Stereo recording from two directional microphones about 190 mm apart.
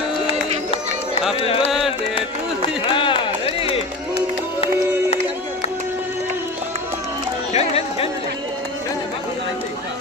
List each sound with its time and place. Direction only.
1.3 s music: 30° left (ahead or behind)
2.1 s run: 25° left (ahead or behind)
7.5 s music: 30° left (ahead or behind)